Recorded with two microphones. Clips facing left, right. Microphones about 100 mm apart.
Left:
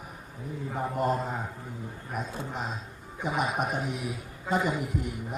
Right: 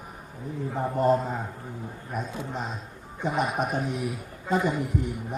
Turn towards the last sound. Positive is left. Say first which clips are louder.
# right 3 dB
turn(degrees=0)  # may be behind; listen again after turning